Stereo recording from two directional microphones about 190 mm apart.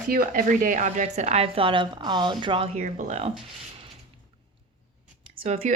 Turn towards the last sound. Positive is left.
turn(degrees=-35)  # may be behind; listen again after turning